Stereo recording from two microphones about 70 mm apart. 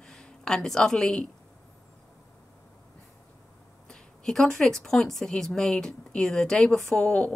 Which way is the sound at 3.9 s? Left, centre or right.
Centre.